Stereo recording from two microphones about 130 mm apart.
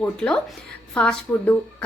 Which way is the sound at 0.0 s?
5° left (ahead or behind).